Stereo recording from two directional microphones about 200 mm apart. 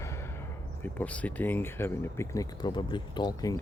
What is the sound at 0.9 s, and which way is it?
Speech, 5° left (ahead or behind).